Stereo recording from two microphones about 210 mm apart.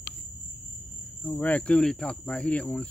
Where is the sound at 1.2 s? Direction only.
5° left (ahead or behind).